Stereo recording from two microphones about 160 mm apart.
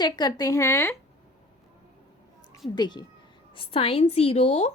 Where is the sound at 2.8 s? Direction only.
25° left (ahead or behind); by 4.7 s 45° left (ahead or behind).